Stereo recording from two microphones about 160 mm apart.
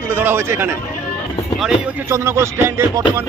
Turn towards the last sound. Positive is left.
turn(degrees=-15)  # may be behind; listen again after turning